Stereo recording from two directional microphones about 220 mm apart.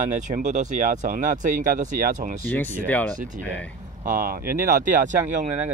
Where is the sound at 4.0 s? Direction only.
40° right (ahead or behind).